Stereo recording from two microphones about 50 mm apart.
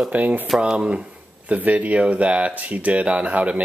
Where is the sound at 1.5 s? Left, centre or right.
Right.